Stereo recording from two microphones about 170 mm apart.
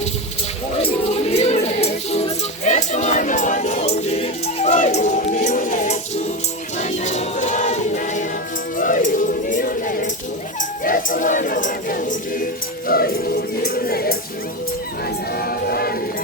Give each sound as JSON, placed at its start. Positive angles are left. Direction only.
{"t": 0.8, "sound": "music", "side_deg": 35}
{"t": 8.8, "sound": "choir", "side_deg": 50}
{"t": 10.6, "sound": "a sound", "side_deg": 55}
{"t": 12.9, "sound": "music", "side_deg": 60}
{"t": 15.4, "sound": "music", "side_deg": 65}